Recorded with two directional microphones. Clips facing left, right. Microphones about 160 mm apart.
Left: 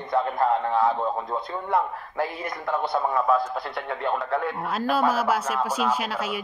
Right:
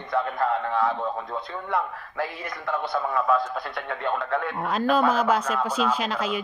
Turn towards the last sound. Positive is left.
turn(degrees=10)  # may be behind; listen again after turning